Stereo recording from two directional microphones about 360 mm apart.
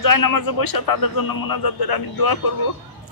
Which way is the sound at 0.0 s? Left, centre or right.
Left.